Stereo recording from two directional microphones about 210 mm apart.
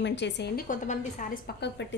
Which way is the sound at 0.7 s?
40° left (ahead or behind).